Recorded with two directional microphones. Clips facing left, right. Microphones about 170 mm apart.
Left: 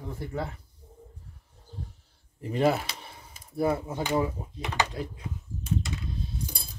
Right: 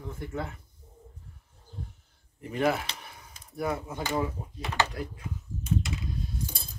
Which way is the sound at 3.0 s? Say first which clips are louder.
Left 1 dB; 30° left (ahead or behind).